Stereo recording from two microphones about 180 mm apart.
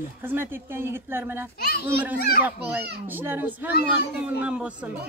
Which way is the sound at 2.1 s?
60° left (ahead or behind).